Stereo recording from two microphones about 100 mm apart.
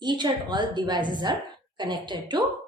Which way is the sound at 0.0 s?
50° right (ahead or behind).